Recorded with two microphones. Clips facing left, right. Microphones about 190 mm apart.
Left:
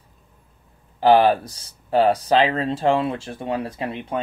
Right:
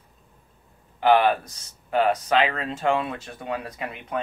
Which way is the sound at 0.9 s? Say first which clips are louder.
Left 4 dB; 35° left (ahead or behind).